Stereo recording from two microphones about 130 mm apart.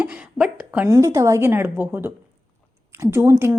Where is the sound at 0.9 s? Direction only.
25° right (ahead or behind).